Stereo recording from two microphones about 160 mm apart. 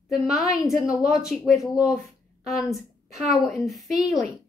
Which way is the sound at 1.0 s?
5° right (ahead or behind).